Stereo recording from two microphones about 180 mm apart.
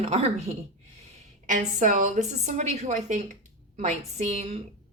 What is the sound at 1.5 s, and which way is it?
A woman's voice, 45° right (ahead or behind).